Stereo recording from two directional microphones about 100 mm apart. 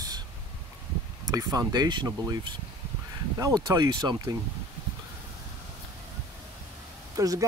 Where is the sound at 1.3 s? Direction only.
40° right (ahead or behind).